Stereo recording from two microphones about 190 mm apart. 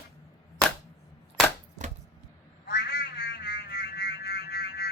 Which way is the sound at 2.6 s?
60° left (ahead or behind).